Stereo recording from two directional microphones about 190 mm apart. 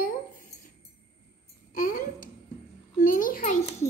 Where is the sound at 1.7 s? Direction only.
45° left (ahead or behind).